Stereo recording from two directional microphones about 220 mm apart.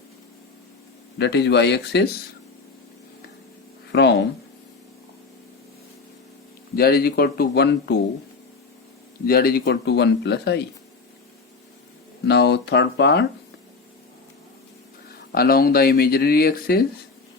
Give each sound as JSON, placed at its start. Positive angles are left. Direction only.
{"t": 1.2, "sound": "speech", "side_deg": 50}
{"t": 3.9, "sound": "a sound", "side_deg": 50}
{"t": 6.7, "sound": "speech", "side_deg": 45}
{"t": 9.2, "sound": "speech", "side_deg": 40}
{"t": 12.3, "sound": "speech", "side_deg": 50}
{"t": 15.3, "sound": "speech", "side_deg": 45}